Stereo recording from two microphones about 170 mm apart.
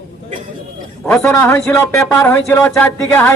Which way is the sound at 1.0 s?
15° left (ahead or behind).